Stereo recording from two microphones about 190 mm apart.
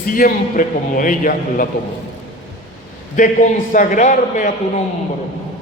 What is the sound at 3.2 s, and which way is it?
A man's voice, 40° left (ahead or behind).